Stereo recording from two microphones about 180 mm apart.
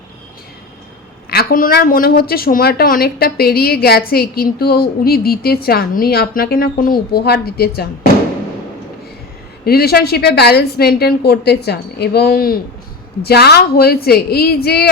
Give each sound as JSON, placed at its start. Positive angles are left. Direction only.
{"t": 1.3, "sound": "a woman's voice", "side_deg": 60}
{"t": 9.6, "sound": "a woman's voice", "side_deg": 60}